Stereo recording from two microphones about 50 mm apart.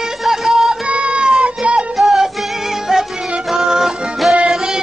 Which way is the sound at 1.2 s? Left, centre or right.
Centre.